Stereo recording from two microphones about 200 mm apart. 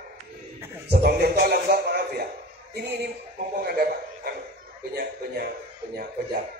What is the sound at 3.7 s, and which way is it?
A man's voice, 50° right (ahead or behind).